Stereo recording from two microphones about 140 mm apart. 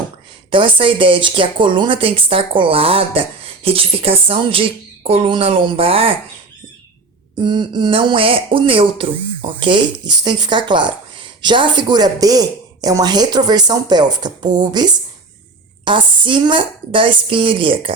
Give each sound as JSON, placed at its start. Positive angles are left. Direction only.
{"t": 0.5, "sound": "speech", "side_deg": -35}
{"t": 7.3, "sound": "speech", "side_deg": -35}